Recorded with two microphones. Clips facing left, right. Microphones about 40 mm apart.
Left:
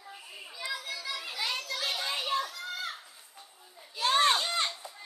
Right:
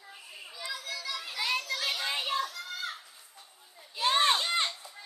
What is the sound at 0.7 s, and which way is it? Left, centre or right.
Music, centre.